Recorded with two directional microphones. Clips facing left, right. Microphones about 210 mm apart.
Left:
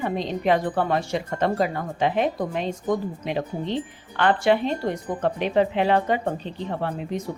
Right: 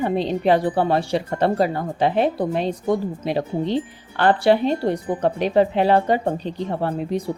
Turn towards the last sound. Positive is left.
turn(degrees=-35)  # may be behind; listen again after turning